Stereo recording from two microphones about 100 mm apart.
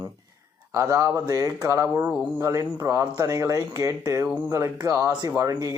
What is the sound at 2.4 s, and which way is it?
Speech, 35° right (ahead or behind).